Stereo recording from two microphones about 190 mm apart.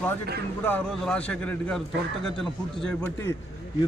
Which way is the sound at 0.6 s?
5° left (ahead or behind).